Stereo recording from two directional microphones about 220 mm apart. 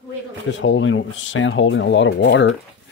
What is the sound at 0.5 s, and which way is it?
Speech, 60° left (ahead or behind).